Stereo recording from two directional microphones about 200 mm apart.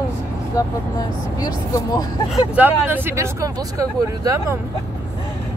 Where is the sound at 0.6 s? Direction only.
15° left (ahead or behind).